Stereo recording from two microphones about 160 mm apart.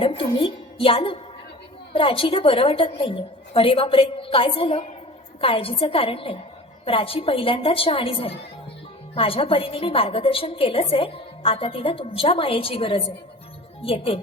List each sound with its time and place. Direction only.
0.0 s a woman's voice: 35° left (ahead or behind)